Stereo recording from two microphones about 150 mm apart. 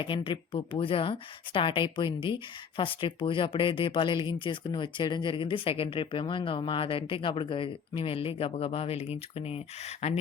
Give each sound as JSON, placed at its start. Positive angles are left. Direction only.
{"t": 0.0, "sound": "speech", "side_deg": 35}